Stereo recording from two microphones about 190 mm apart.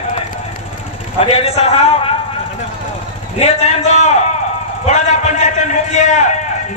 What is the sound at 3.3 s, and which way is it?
Speech, 35° left (ahead or behind).